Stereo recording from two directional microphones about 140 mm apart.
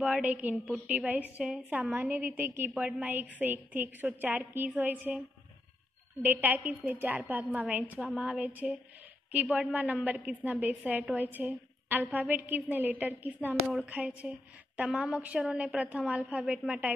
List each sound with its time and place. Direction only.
0.0 s a woman's voice: 10° right (ahead or behind)
6.2 s a woman's voice: 15° right (ahead or behind)